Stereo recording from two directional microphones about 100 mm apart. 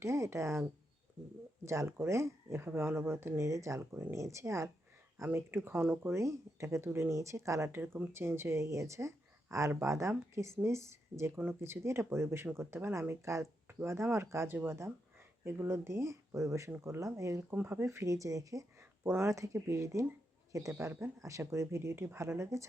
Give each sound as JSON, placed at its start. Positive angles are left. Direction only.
{"t": 0.0, "sound": "speech", "side_deg": -30}
{"t": 17.5, "sound": "speech", "side_deg": -20}